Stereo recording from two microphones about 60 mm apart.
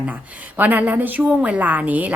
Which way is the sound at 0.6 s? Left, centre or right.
Right.